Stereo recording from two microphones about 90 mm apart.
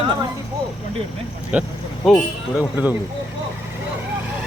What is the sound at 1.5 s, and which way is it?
Speech, 15° right (ahead or behind).